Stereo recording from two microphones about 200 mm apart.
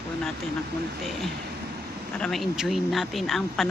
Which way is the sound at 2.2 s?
5° left (ahead or behind).